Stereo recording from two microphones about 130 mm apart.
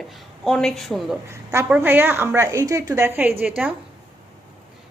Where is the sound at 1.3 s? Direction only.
20° right (ahead or behind).